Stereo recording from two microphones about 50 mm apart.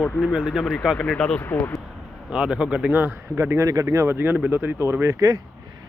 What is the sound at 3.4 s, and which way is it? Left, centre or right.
Speech, right.